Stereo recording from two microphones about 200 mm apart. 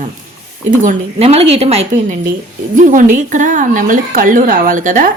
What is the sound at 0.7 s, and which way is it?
A woman's voice, 40° right (ahead or behind).